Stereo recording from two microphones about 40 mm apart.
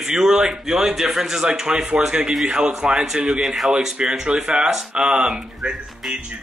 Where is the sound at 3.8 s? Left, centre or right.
Centre.